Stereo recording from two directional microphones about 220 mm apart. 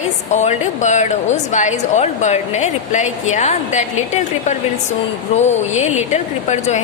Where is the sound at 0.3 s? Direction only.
35° left (ahead or behind).